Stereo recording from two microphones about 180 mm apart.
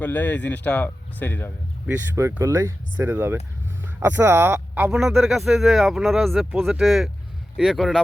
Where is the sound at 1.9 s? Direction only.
10° right (ahead or behind).